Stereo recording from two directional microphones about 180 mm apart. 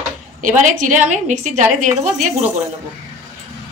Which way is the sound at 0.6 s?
45° right (ahead or behind).